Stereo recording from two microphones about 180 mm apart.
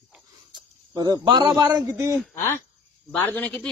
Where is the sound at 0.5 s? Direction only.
20° right (ahead or behind).